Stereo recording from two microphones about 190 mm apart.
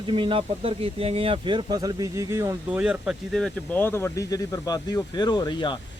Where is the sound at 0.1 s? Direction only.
25° right (ahead or behind); by 3.8 s centre (ahead or behind).